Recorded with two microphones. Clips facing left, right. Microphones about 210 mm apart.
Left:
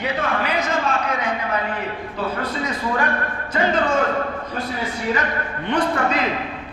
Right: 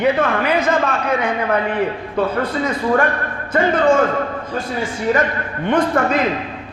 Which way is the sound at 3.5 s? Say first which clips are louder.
Right 5 dB; 55° right (ahead or behind).